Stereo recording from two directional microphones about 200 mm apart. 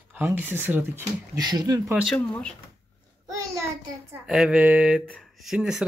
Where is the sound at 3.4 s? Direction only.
15° right (ahead or behind).